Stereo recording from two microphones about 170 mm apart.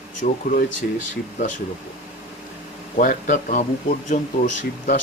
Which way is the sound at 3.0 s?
50° left (ahead or behind).